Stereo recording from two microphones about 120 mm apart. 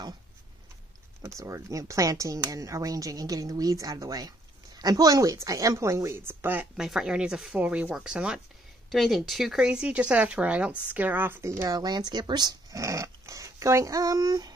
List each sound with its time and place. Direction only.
1.2 s speech: 25° right (ahead or behind)
6.8 s speech: 5° right (ahead or behind); by 14.5 s 30° right (ahead or behind)